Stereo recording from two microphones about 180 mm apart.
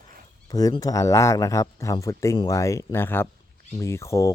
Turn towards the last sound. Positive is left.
turn(degrees=15)  # may be behind; listen again after turning